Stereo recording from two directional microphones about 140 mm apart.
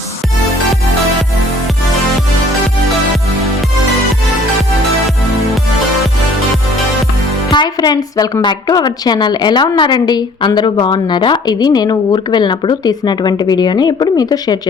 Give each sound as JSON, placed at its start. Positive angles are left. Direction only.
{"t": 7.5, "sound": "a woman's voice", "side_deg": 30}